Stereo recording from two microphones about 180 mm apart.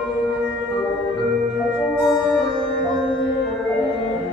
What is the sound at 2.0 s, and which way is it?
Music, centre (ahead or behind).